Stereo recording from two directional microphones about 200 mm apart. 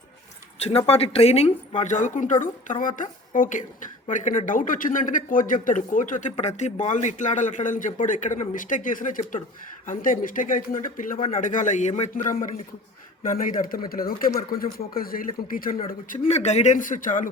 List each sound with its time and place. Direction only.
0.6 s speech: 30° left (ahead or behind)